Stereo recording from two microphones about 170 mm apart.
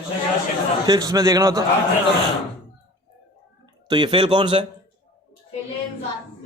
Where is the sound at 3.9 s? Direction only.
30° right (ahead or behind).